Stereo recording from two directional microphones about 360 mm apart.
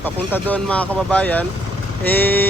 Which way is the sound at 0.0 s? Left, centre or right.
Centre.